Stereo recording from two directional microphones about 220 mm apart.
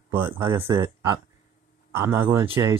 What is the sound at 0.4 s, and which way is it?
Speech, 25° right (ahead or behind).